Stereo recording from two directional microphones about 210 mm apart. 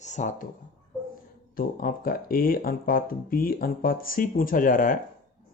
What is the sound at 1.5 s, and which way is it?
Speech, 45° left (ahead or behind).